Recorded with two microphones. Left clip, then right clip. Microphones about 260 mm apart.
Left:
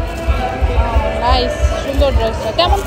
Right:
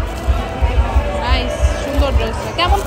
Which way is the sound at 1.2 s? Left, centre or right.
Centre.